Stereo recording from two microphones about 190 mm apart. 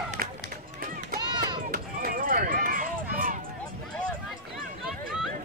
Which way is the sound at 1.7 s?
45° right (ahead or behind).